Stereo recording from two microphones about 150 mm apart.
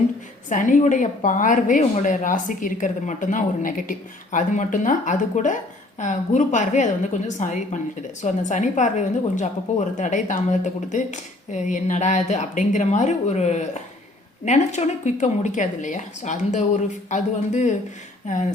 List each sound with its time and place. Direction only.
0.5 s a woman's voice: 60° left (ahead or behind)